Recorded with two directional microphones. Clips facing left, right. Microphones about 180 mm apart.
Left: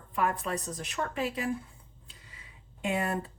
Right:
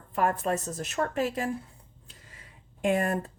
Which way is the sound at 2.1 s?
45° right (ahead or behind).